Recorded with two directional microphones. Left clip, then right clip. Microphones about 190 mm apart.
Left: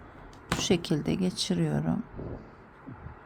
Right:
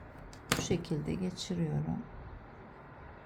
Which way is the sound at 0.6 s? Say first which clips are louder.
Left 8 dB; 25° left (ahead or behind).